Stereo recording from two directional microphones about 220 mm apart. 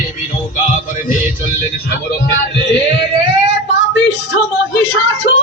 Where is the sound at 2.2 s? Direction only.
50° left (ahead or behind).